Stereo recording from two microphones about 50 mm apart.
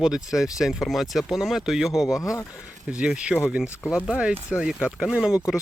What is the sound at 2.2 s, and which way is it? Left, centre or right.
Speech, left.